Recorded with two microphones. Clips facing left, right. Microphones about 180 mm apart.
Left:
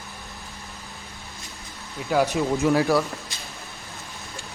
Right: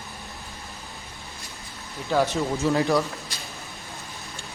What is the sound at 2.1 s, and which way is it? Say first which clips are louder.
Speech: left 2 dB; 15° left (ahead or behind).